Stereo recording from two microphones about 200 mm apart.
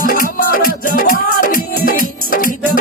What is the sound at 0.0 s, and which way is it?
Music, 45° left (ahead or behind).